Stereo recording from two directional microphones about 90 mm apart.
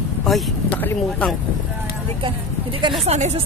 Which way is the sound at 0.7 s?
20° left (ahead or behind).